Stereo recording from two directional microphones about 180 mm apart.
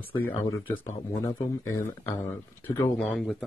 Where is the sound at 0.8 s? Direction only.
15° left (ahead or behind).